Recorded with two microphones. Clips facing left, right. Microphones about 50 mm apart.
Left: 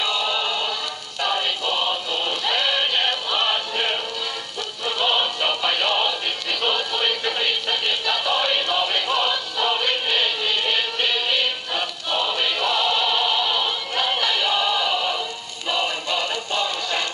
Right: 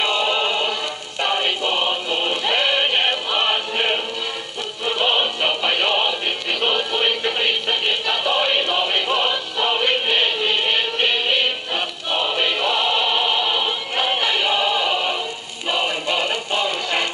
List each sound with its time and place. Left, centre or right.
0.0 s music: right; by 17.1 s centre